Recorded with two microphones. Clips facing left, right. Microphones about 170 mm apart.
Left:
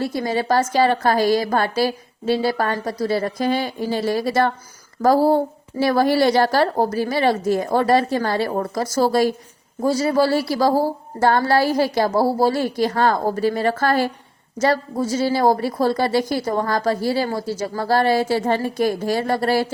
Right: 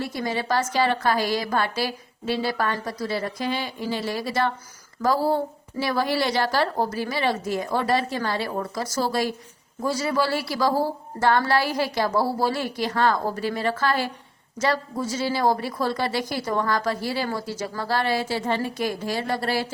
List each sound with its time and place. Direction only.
0.0 s a woman's voice: 35° left (ahead or behind)